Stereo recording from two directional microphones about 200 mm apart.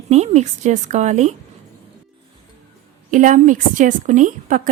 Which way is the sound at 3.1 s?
40° right (ahead or behind).